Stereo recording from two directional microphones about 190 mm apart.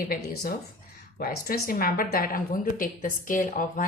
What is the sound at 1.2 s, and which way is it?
A woman's voice, 50° left (ahead or behind).